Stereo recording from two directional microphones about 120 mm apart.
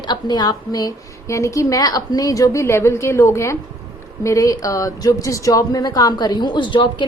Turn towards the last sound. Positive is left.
turn(degrees=40)  # may be behind; listen again after turning